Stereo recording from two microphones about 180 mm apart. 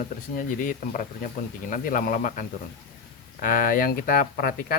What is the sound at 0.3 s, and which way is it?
Speech, 45° left (ahead or behind).